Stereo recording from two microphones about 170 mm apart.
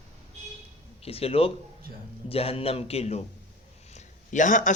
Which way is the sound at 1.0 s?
35° left (ahead or behind).